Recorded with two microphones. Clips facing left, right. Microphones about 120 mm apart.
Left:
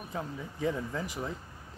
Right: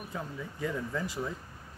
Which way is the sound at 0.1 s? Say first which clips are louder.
Left 3 dB; 20° left (ahead or behind).